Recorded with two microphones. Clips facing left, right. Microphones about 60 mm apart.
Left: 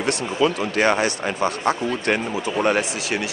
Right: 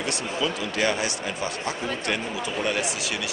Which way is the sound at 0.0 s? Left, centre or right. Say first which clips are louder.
Left 7 dB; left.